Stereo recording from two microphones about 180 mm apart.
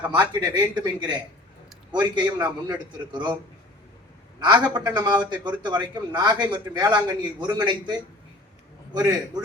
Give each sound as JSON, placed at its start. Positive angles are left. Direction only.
{"t": 0.1, "sound": "a man's voice", "side_deg": -25}
{"t": 4.4, "sound": "a man's voice", "side_deg": -25}